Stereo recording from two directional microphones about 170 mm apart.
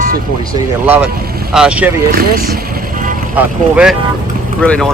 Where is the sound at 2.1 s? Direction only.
60° right (ahead or behind).